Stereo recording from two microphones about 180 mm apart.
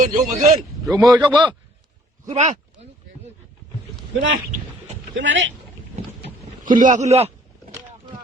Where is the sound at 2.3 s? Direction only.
35° right (ahead or behind).